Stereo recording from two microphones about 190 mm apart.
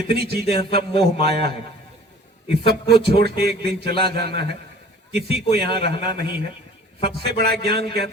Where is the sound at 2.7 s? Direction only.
55° right (ahead or behind).